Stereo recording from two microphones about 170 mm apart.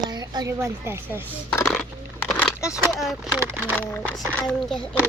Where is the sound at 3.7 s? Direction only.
10° left (ahead or behind).